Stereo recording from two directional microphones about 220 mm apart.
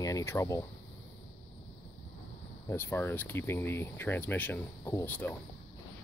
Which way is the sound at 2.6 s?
10° left (ahead or behind).